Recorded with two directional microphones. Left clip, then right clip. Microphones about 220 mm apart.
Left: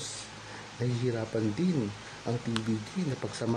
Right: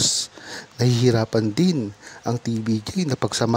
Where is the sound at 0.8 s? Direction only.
45° right (ahead or behind).